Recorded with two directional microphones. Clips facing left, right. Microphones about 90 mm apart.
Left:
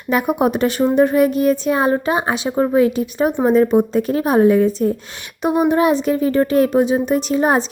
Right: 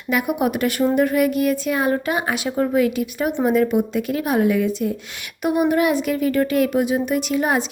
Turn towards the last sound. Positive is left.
turn(degrees=35)  # may be behind; listen again after turning